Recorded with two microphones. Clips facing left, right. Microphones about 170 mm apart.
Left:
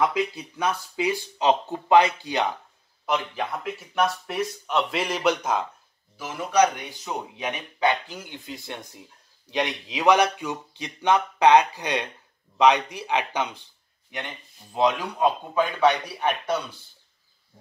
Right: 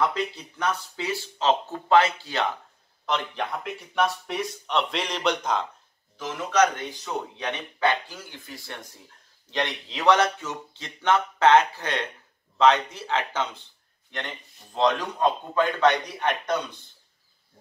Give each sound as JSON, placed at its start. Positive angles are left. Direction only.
{"t": 0.0, "sound": "speech", "side_deg": 10}
{"t": 3.1, "sound": "speech", "side_deg": 5}